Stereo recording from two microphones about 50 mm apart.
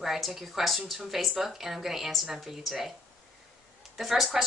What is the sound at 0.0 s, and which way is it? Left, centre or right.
A woman's voice, centre.